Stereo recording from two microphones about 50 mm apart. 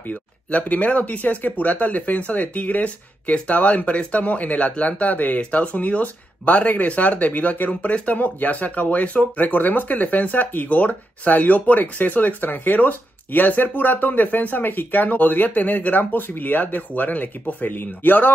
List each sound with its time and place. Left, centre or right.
0.1 s speech: left